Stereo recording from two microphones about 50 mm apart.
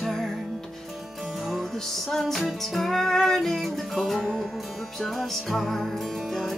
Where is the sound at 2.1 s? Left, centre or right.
Centre.